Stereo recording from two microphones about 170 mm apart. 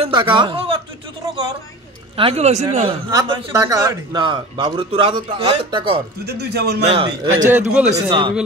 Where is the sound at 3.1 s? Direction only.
25° right (ahead or behind).